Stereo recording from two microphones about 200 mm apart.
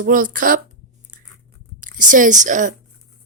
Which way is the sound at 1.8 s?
40° right (ahead or behind).